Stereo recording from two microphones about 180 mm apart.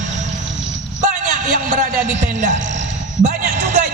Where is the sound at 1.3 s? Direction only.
45° right (ahead or behind).